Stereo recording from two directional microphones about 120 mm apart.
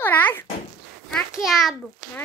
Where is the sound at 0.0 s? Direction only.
15° left (ahead or behind).